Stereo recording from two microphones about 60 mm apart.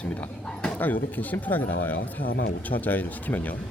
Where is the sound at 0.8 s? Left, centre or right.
Left.